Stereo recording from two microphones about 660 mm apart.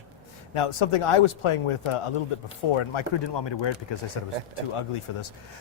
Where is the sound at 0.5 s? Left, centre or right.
Left.